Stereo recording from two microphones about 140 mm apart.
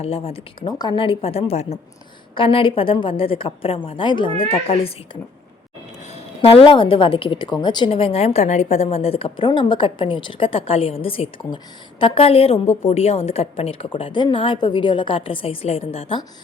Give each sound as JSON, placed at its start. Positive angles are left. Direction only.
{"t": 0.0, "sound": "speech", "side_deg": 45}
{"t": 0.7, "sound": "a woman's voice", "side_deg": 30}
{"t": 2.3, "sound": "a woman's voice", "side_deg": 40}
{"t": 6.4, "sound": "a woman's voice", "side_deg": 40}